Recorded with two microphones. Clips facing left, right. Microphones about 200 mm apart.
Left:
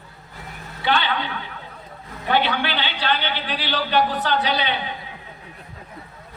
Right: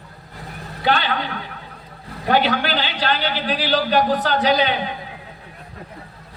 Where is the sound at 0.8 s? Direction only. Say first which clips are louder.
Right 2 dB; 40° right (ahead or behind).